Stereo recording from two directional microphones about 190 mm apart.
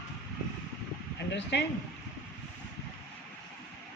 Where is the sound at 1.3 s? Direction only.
65° left (ahead or behind).